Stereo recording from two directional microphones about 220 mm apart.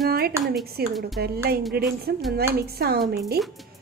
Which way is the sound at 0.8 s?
45° right (ahead or behind).